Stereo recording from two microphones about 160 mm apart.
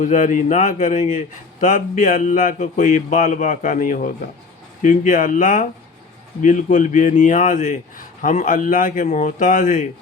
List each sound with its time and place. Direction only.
0.0 s speech: 50° left (ahead or behind)